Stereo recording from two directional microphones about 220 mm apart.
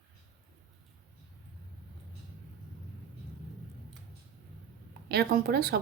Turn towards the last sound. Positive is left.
turn(degrees=-45)  # may be behind; listen again after turning